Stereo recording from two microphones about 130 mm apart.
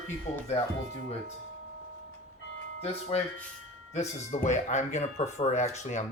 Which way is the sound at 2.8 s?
55° left (ahead or behind).